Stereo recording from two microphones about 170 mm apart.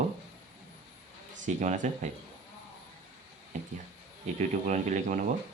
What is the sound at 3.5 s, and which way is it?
Speech, 45° right (ahead or behind).